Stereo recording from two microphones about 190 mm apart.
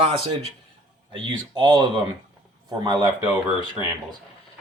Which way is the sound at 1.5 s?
25° right (ahead or behind).